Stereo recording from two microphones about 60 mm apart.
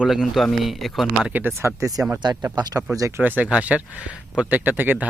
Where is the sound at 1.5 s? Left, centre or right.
Right.